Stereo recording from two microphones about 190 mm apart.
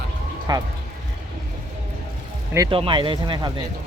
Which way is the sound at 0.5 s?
20° right (ahead or behind).